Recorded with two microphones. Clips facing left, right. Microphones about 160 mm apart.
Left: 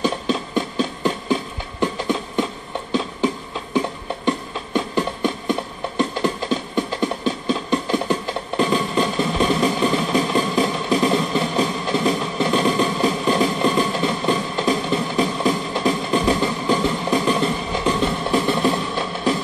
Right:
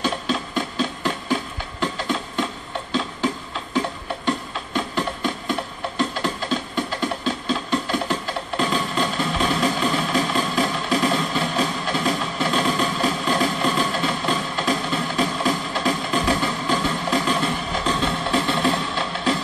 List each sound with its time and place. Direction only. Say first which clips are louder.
0.0 s music: left 3 dB; 20° left (ahead or behind)
4.7 s a sound: left 3 dB; 20° left (ahead or behind)
5.9 s music: left 3 dB; 20° left (ahead or behind)
8.5 s music: left 4 dB; 20° left (ahead or behind)